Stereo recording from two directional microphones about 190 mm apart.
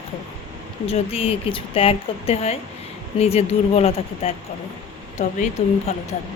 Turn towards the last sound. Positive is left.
turn(degrees=35)  # may be behind; listen again after turning